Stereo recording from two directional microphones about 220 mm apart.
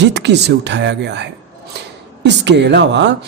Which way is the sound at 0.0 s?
50° right (ahead or behind).